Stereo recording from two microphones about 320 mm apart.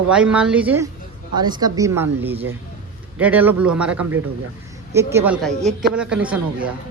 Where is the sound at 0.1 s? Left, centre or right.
Centre.